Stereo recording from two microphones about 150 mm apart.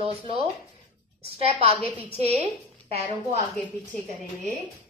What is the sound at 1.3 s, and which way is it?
A woman's voice, 40° right (ahead or behind).